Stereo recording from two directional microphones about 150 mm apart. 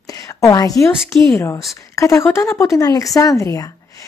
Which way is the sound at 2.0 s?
20° left (ahead or behind).